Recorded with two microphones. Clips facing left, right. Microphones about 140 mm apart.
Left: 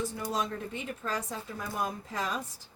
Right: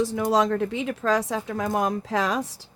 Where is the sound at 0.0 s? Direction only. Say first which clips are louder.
Right 11 dB; 90° right.